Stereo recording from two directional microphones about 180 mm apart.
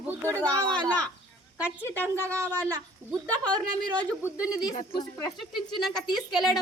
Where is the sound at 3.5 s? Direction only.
25° right (ahead or behind).